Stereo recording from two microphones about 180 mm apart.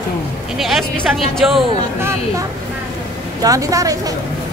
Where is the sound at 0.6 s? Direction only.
Centre (ahead or behind).